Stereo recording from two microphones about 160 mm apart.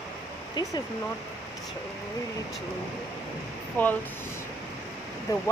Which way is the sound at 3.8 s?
10° left (ahead or behind).